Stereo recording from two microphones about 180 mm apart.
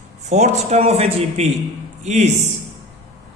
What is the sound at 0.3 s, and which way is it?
Speech, 40° right (ahead or behind).